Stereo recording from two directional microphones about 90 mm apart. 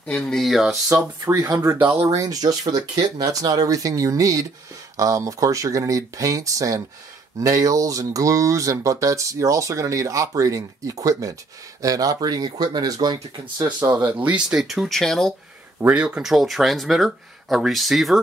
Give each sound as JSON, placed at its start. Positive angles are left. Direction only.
{"t": 0.0, "sound": "speech", "side_deg": 5}
{"t": 1.2, "sound": "speech", "side_deg": -40}
{"t": 13.9, "sound": "speech", "side_deg": -20}
{"t": 14.5, "sound": "speech", "side_deg": -5}
{"t": 15.9, "sound": "speech", "side_deg": -10}